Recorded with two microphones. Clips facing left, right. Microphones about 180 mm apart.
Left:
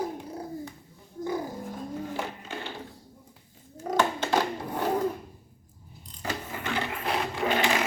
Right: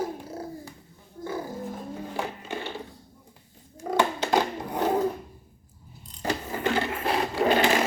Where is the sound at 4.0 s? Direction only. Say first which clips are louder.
Right 2 dB; 15° right (ahead or behind).